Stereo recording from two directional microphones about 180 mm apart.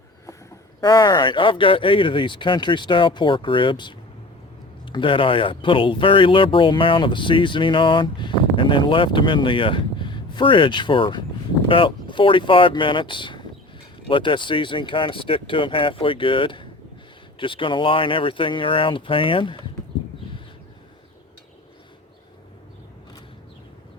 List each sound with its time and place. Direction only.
0.8 s speech: 25° left (ahead or behind)